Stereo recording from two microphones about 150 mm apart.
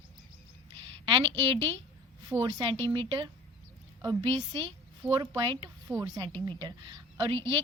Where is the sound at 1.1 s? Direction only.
35° right (ahead or behind).